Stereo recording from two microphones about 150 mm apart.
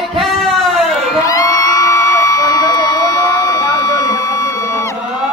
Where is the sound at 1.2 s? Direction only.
25° left (ahead or behind).